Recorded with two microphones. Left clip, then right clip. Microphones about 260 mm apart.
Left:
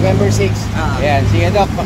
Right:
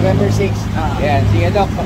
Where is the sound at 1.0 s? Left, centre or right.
Left.